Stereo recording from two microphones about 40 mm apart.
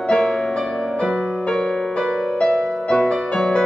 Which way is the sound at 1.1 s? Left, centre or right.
Centre.